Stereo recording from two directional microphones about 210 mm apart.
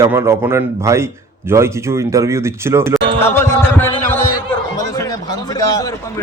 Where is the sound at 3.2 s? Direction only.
10° left (ahead or behind).